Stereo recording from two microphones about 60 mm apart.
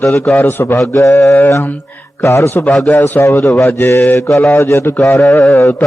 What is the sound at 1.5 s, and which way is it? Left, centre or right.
Music, left.